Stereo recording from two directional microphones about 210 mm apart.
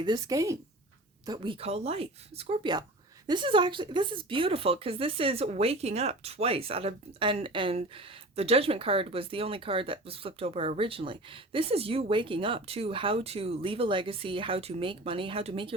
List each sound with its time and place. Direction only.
0.0 s speech: 20° right (ahead or behind)